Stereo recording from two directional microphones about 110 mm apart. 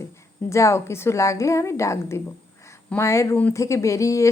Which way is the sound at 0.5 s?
25° left (ahead or behind).